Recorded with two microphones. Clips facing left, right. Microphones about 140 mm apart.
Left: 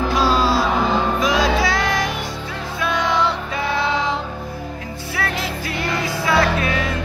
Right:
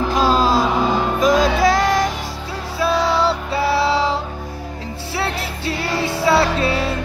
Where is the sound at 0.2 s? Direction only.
45° right (ahead or behind).